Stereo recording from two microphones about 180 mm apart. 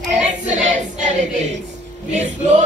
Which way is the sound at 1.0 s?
40° right (ahead or behind).